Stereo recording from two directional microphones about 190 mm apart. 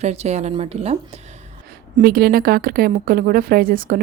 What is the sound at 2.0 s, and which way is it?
A woman's voice, 55° right (ahead or behind).